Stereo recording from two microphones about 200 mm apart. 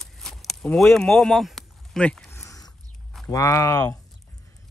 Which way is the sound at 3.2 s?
15° left (ahead or behind).